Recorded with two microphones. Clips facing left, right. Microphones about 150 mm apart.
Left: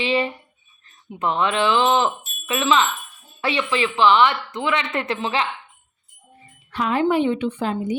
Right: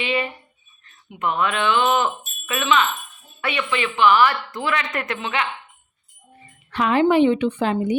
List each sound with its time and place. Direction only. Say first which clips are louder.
0.0 s speech: left 3 dB; 30° left (ahead or behind)
6.7 s a woman's voice: right 3 dB; 80° right